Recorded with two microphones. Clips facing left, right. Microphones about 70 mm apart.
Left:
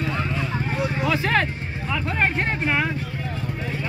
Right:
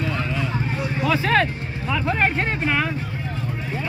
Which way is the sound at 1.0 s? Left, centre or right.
Centre.